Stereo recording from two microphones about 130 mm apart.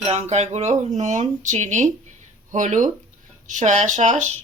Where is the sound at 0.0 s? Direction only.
55° right (ahead or behind).